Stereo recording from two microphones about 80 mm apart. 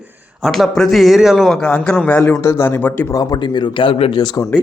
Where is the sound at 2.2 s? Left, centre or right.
Left.